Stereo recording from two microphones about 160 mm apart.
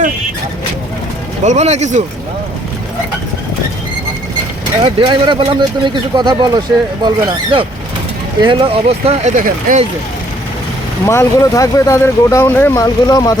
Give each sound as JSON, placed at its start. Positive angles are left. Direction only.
{"t": 1.5, "sound": "speech", "side_deg": -45}
{"t": 4.8, "sound": "speech", "side_deg": -30}
{"t": 11.0, "sound": "speech", "side_deg": 20}